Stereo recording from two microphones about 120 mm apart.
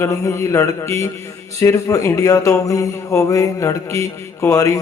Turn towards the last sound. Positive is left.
turn(degrees=25)  # may be behind; listen again after turning